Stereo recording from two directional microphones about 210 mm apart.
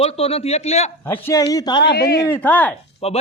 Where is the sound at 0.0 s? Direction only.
30° left (ahead or behind).